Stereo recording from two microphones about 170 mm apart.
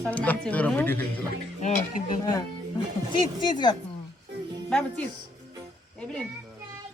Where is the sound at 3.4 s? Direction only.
25° left (ahead or behind).